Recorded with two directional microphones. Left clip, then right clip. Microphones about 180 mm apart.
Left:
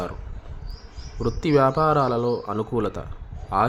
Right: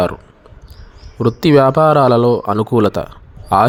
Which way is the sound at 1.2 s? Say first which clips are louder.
Right 9 dB; 35° right (ahead or behind).